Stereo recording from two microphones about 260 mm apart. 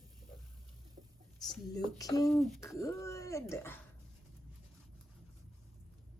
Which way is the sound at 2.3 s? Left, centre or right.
Centre.